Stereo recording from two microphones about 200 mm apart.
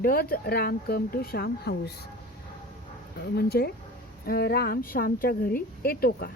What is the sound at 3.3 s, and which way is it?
A woman's voice, 55° left (ahead or behind).